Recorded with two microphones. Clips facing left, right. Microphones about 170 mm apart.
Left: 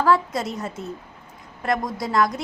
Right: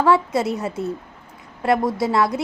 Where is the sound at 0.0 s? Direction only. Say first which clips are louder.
Right 3 dB; 25° right (ahead or behind).